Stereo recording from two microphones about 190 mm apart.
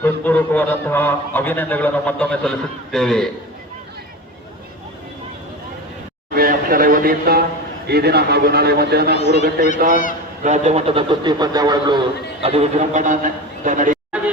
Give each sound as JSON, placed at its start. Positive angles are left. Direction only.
{"t": 0.0, "sound": "a man's voice", "side_deg": 10}
{"t": 6.3, "sound": "a sound", "side_deg": -50}
{"t": 7.9, "sound": "a man's voice", "side_deg": -60}
{"t": 9.1, "sound": "speech", "side_deg": 35}
{"t": 9.9, "sound": "a man's voice", "side_deg": 45}
{"t": 10.4, "sound": "a man's voice", "side_deg": -35}